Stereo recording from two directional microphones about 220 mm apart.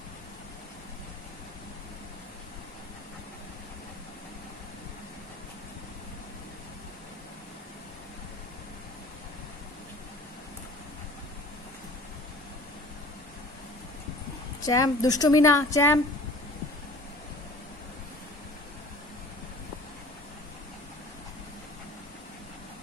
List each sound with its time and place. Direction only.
14.6 s a woman's voice: 15° left (ahead or behind)